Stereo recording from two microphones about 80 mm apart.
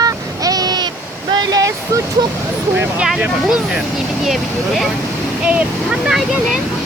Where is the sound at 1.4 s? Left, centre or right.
Right.